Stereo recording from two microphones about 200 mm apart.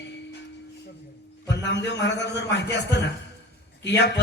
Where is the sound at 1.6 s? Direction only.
60° left (ahead or behind).